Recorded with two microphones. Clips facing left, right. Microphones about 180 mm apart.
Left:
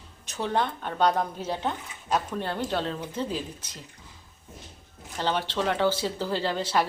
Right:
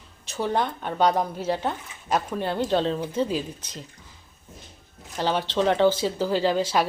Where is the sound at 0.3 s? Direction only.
10° right (ahead or behind).